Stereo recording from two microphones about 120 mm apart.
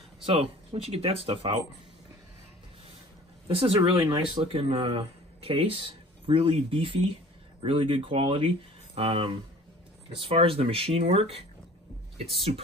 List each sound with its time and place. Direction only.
0.2 s speech: 45° right (ahead or behind)
3.4 s speech: 55° right (ahead or behind)
8.9 s speech: 55° right (ahead or behind)